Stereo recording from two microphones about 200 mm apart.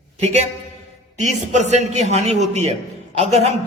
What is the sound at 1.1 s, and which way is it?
A man's voice, 35° right (ahead or behind).